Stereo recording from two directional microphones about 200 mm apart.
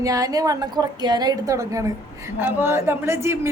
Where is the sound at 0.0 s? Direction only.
15° right (ahead or behind).